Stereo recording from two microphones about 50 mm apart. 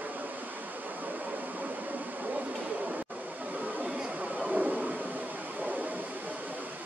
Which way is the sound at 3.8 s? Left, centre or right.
Centre.